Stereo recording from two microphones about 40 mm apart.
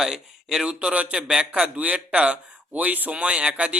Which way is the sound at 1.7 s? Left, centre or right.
Right.